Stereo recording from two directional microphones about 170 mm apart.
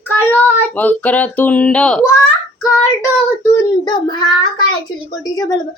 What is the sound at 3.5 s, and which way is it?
Speech, 25° left (ahead or behind).